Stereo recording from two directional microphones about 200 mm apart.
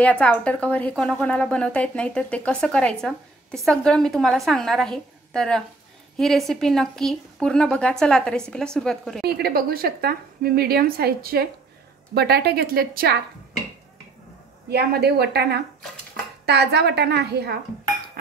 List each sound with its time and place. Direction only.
0.0 s speech: 5° left (ahead or behind)
9.2 s a woman's voice: 50° right (ahead or behind)
14.7 s a woman's voice: 55° right (ahead or behind)
18.2 s music: 50° right (ahead or behind)